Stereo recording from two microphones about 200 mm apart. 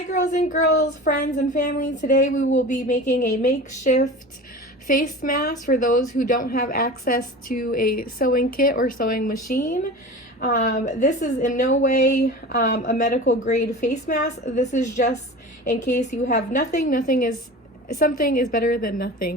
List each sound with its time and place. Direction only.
0.1 s a woman's voice: 35° left (ahead or behind)